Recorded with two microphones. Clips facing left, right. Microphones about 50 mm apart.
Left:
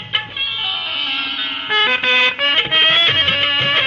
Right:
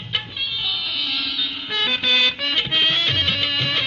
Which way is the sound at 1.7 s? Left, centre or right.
Left.